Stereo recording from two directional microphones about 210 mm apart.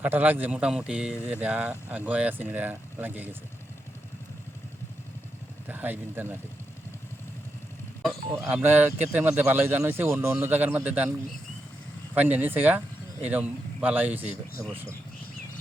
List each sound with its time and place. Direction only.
0.0 s speech: 10° right (ahead or behind)
5.6 s speech: 10° right (ahead or behind)
8.3 s speech: 5° right (ahead or behind)
12.1 s speech: 10° right (ahead or behind)